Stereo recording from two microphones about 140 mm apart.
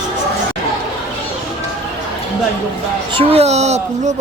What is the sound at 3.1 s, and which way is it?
Speech, 45° right (ahead or behind).